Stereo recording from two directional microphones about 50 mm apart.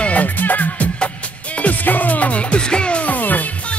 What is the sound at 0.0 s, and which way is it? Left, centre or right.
Music, left.